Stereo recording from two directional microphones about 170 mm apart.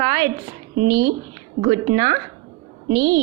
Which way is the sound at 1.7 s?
25° right (ahead or behind).